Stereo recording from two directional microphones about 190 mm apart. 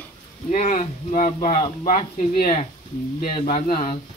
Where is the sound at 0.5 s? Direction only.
40° left (ahead or behind).